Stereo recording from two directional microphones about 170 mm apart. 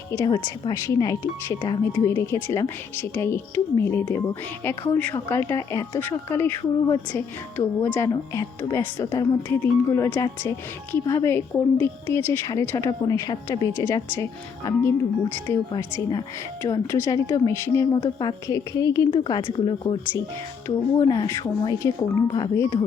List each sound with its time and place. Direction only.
0.1 s speech: 20° left (ahead or behind)
15.7 s speech: 25° left (ahead or behind)